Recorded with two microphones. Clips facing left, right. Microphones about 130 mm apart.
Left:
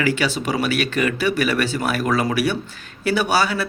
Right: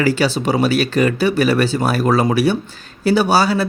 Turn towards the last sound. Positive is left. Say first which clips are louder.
# right 5 dB
turn(degrees=-30)  # may be behind; listen again after turning